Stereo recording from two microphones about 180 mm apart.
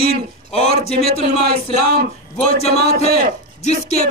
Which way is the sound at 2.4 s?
35° left (ahead or behind).